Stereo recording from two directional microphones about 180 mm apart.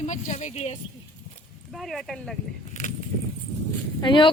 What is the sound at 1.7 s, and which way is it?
Speech, centre (ahead or behind).